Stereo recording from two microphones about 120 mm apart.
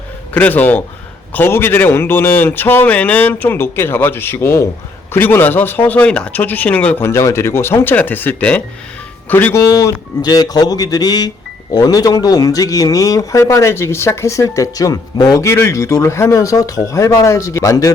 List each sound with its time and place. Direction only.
0.3 s a man's voice: 15° left (ahead or behind)